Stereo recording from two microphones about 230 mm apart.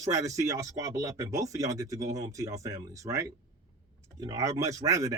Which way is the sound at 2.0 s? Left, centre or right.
Right.